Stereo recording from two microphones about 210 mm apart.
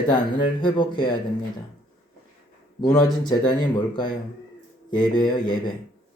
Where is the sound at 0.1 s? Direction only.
20° left (ahead or behind).